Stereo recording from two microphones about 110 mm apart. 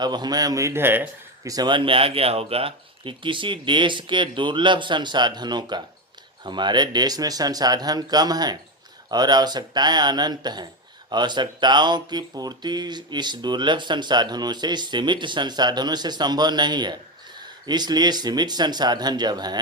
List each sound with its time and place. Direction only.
0.0 s speech: 40° right (ahead or behind); by 1.0 s 20° right (ahead or behind)
1.5 s speech: 40° right (ahead or behind)